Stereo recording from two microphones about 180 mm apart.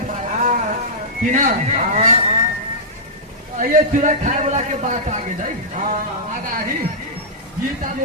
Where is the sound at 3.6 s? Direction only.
45° right (ahead or behind).